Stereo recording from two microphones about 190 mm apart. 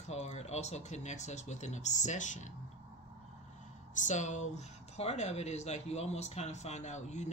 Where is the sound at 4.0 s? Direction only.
40° left (ahead or behind).